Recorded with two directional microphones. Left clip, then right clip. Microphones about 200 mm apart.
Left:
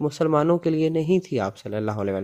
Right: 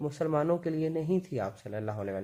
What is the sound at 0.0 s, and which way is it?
Speech, 35° left (ahead or behind).